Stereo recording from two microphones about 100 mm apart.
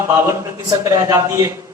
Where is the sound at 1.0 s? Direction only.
40° right (ahead or behind).